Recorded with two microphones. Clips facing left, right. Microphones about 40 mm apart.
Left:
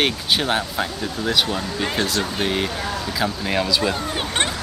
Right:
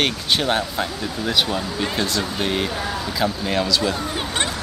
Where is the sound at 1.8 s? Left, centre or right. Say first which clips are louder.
Left 2 dB; centre.